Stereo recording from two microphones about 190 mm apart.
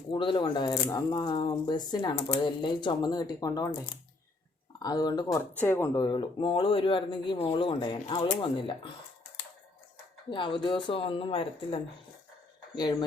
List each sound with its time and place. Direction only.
0.1 s speech: 25° left (ahead or behind)
4.8 s speech: 20° left (ahead or behind)
10.2 s speech: 25° left (ahead or behind)